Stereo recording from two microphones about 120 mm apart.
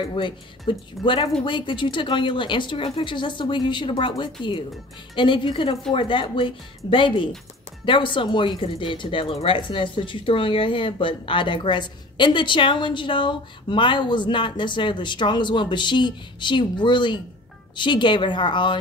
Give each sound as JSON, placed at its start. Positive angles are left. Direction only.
{"t": 0.0, "sound": "a woman's voice", "side_deg": 45}